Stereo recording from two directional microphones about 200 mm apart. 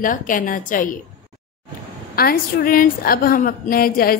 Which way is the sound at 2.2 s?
50° left (ahead or behind).